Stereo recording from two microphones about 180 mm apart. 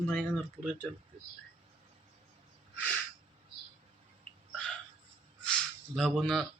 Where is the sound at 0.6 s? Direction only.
5° left (ahead or behind).